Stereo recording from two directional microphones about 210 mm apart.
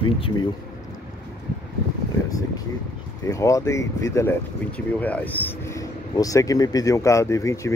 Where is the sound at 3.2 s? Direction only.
15° left (ahead or behind).